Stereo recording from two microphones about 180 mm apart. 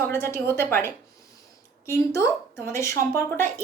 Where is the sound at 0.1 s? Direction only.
15° left (ahead or behind).